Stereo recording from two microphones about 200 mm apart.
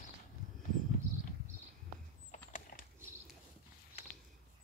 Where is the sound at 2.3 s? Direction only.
45° left (ahead or behind).